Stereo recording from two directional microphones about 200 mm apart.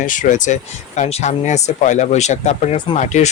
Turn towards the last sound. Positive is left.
turn(degrees=35)  # may be behind; listen again after turning